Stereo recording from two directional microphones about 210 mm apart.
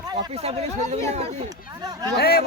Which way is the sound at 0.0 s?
20° right (ahead or behind).